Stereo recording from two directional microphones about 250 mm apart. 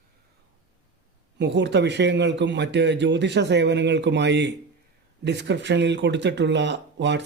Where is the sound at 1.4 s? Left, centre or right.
Right.